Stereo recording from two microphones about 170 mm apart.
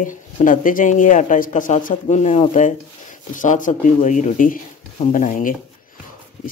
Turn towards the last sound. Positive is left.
turn(degrees=50)  # may be behind; listen again after turning